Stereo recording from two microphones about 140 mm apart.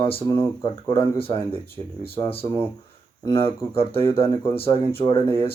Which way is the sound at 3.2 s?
20° left (ahead or behind).